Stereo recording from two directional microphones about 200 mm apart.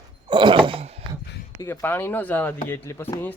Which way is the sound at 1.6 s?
15° left (ahead or behind).